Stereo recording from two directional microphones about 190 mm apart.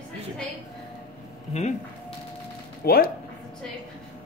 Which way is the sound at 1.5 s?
35° left (ahead or behind).